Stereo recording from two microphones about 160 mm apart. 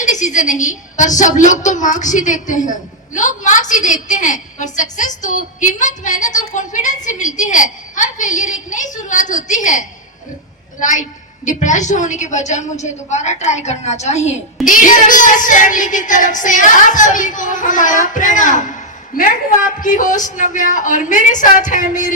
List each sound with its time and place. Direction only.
0.0 s a woman's voice: 50° left (ahead or behind)